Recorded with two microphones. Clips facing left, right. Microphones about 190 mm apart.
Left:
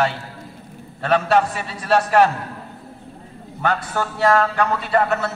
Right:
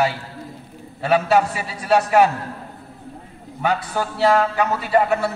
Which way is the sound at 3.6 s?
10° right (ahead or behind).